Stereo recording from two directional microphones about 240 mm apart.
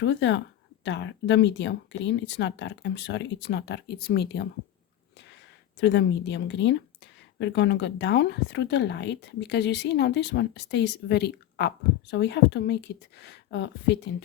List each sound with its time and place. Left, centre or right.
0.0 s speech: left
5.8 s speech: left